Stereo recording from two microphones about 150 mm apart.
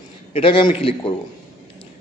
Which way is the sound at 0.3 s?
35° left (ahead or behind).